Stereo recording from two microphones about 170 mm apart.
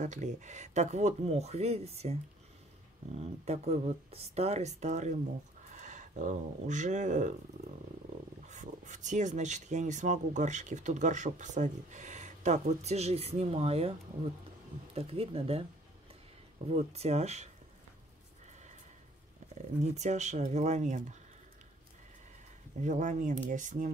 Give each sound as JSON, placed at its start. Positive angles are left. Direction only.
{"t": 0.0, "sound": "speech", "side_deg": -45}
{"t": 3.2, "sound": "speech", "side_deg": -40}
{"t": 8.5, "sound": "speech", "side_deg": -45}
{"t": 15.0, "sound": "speech", "side_deg": -35}
{"t": 16.6, "sound": "speech", "side_deg": -35}
{"t": 19.4, "sound": "a sound", "side_deg": -45}
{"t": 19.8, "sound": "speech", "side_deg": -40}
{"t": 22.8, "sound": "speech", "side_deg": -45}